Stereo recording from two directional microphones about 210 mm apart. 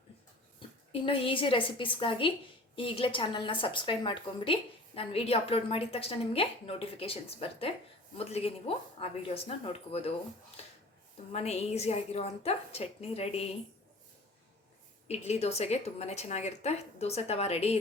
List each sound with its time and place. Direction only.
0.9 s a woman's voice: 25° left (ahead or behind)
11.3 s a woman's voice: 30° left (ahead or behind)
15.0 s a woman's voice: 30° left (ahead or behind)